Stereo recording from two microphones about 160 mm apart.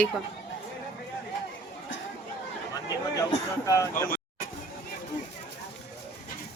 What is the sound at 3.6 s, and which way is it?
Speech, 20° left (ahead or behind).